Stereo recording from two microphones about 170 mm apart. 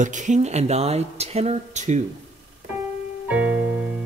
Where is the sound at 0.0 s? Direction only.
45° right (ahead or behind).